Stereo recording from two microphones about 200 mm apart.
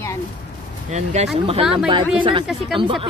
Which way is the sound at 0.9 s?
35° right (ahead or behind).